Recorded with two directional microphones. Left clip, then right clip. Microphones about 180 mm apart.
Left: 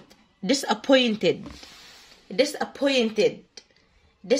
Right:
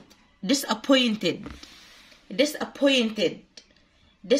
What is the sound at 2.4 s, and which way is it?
Speech, 30° left (ahead or behind).